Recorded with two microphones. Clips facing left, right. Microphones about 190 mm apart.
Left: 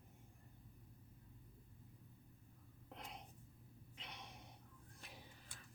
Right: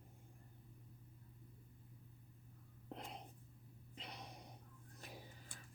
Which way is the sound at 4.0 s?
35° right (ahead or behind).